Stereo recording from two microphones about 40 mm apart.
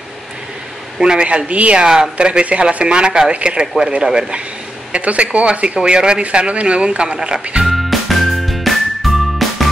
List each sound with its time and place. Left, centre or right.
0.9 s speech: right
5.0 s speech: right
7.6 s music: centre